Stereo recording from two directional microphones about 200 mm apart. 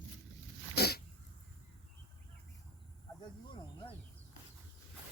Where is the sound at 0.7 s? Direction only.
50° left (ahead or behind).